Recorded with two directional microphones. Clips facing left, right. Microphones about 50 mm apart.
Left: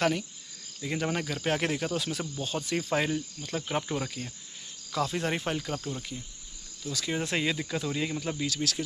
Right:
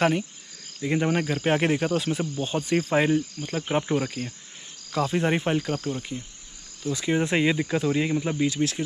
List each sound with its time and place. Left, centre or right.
0.8 s speech: right